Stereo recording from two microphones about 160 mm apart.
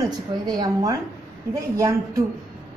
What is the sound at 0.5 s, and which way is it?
A woman's voice, 25° right (ahead or behind).